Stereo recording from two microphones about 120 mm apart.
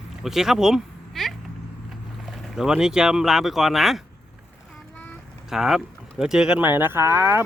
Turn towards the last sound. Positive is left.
turn(degrees=-20)  # may be behind; listen again after turning